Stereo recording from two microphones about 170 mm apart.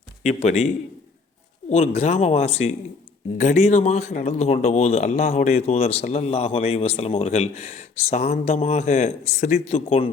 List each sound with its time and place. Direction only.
0.2 s speech: 40° left (ahead or behind)
1.7 s speech: 40° left (ahead or behind)